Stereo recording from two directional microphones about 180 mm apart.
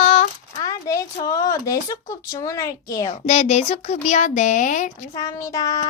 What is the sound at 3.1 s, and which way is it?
Speech, 35° left (ahead or behind).